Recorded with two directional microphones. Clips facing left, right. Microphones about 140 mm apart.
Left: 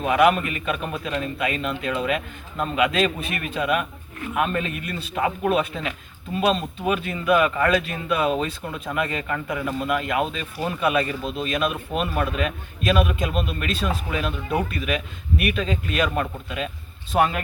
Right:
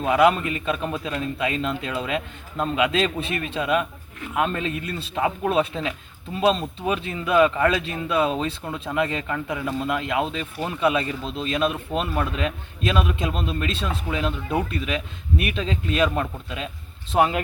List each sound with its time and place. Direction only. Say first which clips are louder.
0.0 s speech: even; 25° right (ahead or behind)